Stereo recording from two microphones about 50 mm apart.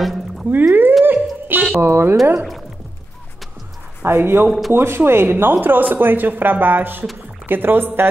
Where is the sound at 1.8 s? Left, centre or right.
Right.